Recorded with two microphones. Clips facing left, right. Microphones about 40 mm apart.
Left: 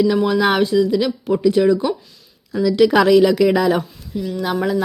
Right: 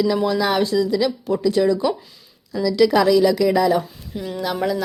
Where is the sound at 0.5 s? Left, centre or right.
Left.